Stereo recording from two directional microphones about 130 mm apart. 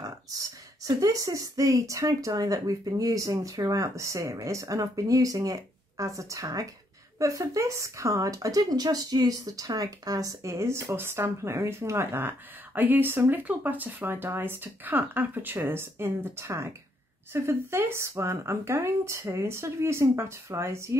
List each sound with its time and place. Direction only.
0.0 s speech: 25° right (ahead or behind)